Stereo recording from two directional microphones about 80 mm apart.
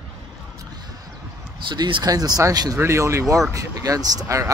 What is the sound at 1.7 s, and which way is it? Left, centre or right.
Speech, right.